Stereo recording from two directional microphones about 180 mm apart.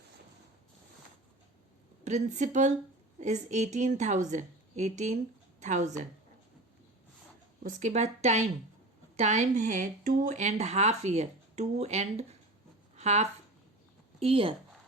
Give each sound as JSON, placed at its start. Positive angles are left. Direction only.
{"t": 2.0, "sound": "speech", "side_deg": -40}
{"t": 7.6, "sound": "speech", "side_deg": -40}